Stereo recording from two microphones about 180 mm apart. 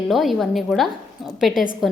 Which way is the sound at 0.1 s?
Centre (ahead or behind).